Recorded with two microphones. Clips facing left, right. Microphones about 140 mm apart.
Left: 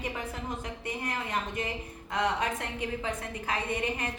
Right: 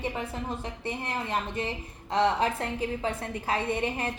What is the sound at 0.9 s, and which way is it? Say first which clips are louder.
A woman's voice: right 3 dB; 30° right (ahead or behind).